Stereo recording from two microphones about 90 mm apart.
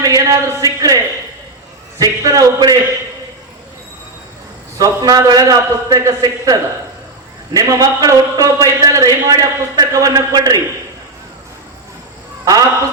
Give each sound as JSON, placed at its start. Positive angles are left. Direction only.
{"t": 0.0, "sound": "a man's voice", "side_deg": -40}
{"t": 4.8, "sound": "a man's voice", "side_deg": -45}